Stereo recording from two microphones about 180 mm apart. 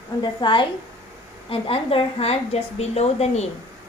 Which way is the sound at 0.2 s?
25° left (ahead or behind).